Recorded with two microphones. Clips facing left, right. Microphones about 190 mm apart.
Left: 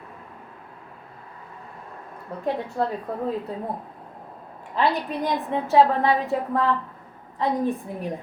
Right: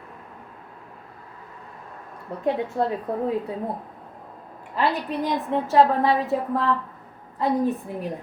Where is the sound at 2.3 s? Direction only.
20° right (ahead or behind).